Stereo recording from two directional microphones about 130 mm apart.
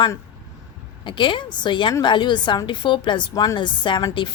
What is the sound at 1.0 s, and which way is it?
A woman's voice, 40° left (ahead or behind).